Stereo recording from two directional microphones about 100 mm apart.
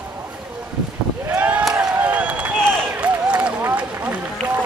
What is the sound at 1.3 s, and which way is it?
Boat, 15° right (ahead or behind).